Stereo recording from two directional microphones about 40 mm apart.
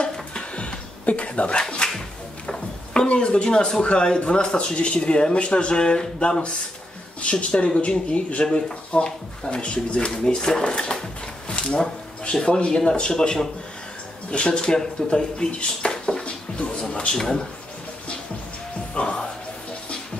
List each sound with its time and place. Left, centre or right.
0.0 s a sound: left
1.8 s whip: left
3.1 s speech: left
11.4 s a sound: left
11.8 s speech: centre
14.3 s speech: left
18.9 s music: left